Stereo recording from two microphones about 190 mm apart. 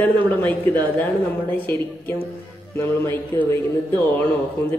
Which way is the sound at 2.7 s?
10° left (ahead or behind).